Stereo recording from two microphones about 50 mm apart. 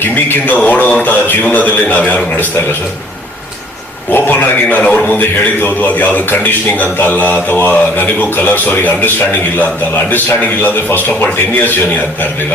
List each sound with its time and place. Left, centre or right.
0.0 s a man's voice: left
0.5 s a man's voice: left
4.1 s a man's voice: left